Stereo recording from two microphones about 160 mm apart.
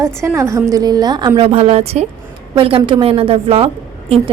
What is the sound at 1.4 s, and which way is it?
A woman's voice, 40° right (ahead or behind).